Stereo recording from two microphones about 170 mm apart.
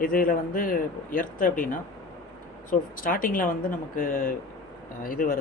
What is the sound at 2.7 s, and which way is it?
Speech, 55° left (ahead or behind).